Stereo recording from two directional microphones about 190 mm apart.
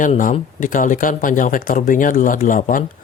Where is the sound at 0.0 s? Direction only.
45° left (ahead or behind).